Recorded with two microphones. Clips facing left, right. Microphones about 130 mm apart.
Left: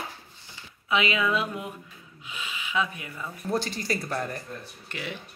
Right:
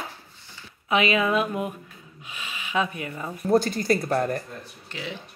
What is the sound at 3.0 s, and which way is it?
Speech, 30° right (ahead or behind).